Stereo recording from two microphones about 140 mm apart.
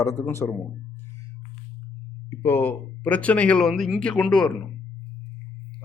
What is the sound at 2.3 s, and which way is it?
Speech, 15° left (ahead or behind).